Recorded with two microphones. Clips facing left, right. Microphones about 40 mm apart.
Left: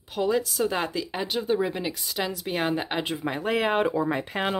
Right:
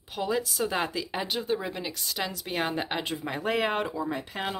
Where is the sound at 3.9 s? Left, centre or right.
Left.